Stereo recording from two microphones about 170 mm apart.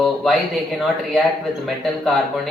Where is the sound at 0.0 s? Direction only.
Centre (ahead or behind).